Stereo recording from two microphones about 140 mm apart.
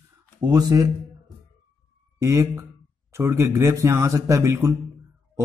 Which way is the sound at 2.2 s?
20° right (ahead or behind).